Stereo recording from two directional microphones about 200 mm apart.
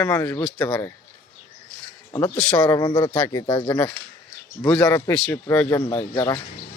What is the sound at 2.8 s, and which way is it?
Speech, 20° left (ahead or behind).